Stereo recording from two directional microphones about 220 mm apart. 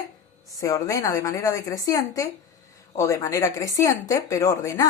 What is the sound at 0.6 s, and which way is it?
A woman's voice, 15° left (ahead or behind).